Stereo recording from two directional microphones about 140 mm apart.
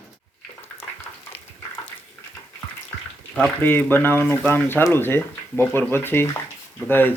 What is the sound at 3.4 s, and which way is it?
Speech, 10° left (ahead or behind).